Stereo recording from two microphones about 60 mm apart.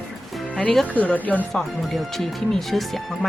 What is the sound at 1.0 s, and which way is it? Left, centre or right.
Speech, left.